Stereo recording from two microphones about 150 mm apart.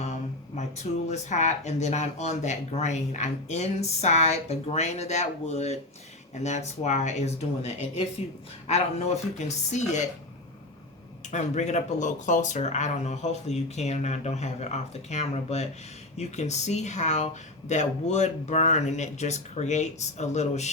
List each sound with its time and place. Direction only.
0.0 s speech: 50° left (ahead or behind)
11.3 s speech: 50° left (ahead or behind)